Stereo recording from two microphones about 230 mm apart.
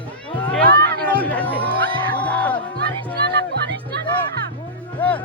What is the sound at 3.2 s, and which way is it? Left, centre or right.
Music, right.